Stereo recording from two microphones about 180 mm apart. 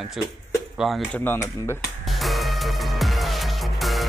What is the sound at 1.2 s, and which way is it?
Speech, 15° left (ahead or behind).